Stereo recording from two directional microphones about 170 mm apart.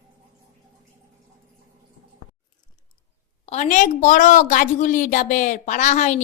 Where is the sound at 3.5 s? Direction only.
45° left (ahead or behind).